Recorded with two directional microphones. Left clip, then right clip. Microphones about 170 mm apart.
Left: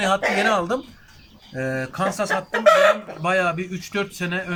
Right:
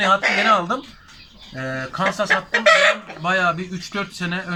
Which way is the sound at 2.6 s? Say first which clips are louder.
Even; 50° left (ahead or behind).